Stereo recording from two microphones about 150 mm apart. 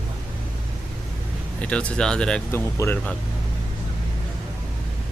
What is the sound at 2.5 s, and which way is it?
Speech, 15° left (ahead or behind).